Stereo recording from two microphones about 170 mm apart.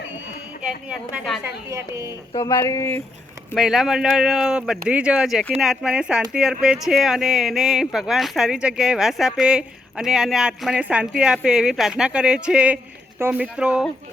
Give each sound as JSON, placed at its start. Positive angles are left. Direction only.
{"t": 0.9, "sound": "speech", "side_deg": -5}
{"t": 2.6, "sound": "speech", "side_deg": 15}
{"t": 3.5, "sound": "speech", "side_deg": 0}